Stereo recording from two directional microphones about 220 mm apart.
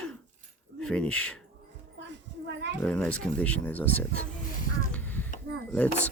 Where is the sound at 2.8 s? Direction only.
5° left (ahead or behind).